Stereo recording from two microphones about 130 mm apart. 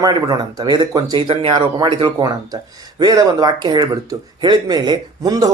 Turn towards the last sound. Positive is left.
turn(degrees=-30)  # may be behind; listen again after turning